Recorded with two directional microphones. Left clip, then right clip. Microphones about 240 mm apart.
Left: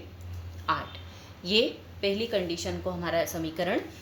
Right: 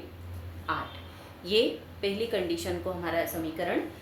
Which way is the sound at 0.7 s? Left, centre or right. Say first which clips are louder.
Left 3 dB; left.